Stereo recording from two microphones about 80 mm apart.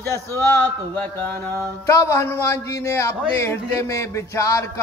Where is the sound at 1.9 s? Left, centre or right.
Left.